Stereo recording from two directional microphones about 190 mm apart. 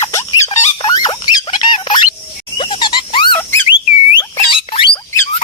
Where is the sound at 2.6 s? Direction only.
25° left (ahead or behind).